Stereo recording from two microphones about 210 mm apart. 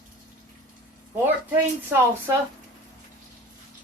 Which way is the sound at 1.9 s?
10° right (ahead or behind).